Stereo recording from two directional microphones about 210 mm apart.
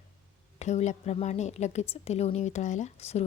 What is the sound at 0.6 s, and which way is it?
A woman's voice, 35° left (ahead or behind).